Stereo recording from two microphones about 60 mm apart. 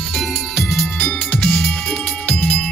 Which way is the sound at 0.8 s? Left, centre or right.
Left.